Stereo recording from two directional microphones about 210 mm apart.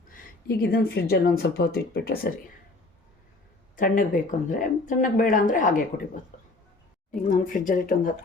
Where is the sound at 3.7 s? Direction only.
40° left (ahead or behind).